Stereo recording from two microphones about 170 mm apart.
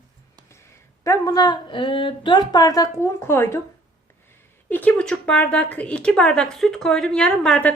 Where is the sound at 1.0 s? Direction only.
20° left (ahead or behind).